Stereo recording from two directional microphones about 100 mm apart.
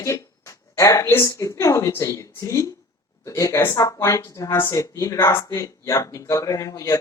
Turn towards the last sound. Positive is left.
turn(degrees=35)  # may be behind; listen again after turning